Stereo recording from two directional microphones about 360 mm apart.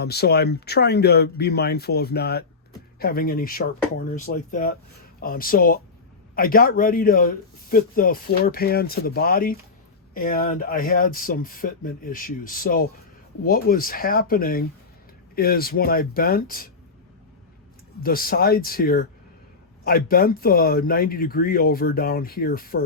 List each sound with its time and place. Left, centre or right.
0.0 s speech: left
18.0 s speech: left